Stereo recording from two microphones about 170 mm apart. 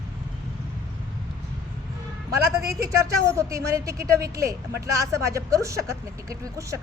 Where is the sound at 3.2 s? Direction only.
15° right (ahead or behind).